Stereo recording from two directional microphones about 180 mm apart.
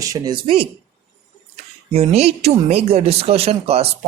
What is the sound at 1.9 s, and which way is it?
Speech, 35° right (ahead or behind).